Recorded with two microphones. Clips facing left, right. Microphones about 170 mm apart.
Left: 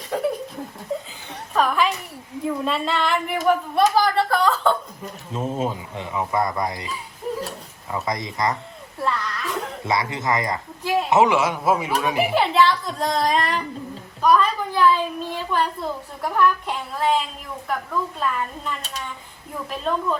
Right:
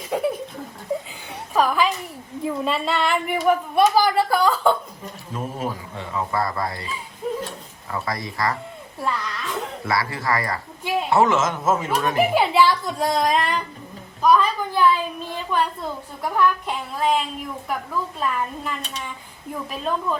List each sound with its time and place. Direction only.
0.1 s laughter: 5° right (ahead or behind)
1.5 s a woman's voice: centre (ahead or behind)
5.3 s speech: 25° left (ahead or behind)
9.0 s speech: centre (ahead or behind)
9.8 s speech: 20° left (ahead or behind)
12.3 s speech: 5° right (ahead or behind)